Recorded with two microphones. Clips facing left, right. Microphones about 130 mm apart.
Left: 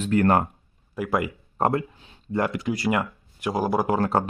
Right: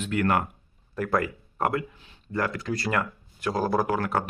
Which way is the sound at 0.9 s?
10° left (ahead or behind).